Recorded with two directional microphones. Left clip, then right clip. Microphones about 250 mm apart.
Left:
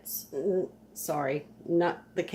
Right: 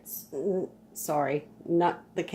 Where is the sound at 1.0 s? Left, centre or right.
Centre.